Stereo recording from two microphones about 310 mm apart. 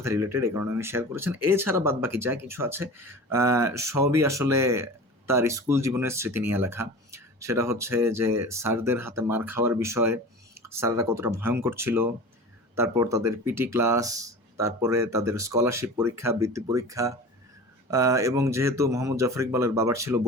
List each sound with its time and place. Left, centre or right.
0.0 s speech: centre